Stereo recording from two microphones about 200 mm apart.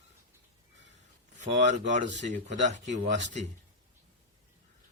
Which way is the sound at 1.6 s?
35° right (ahead or behind).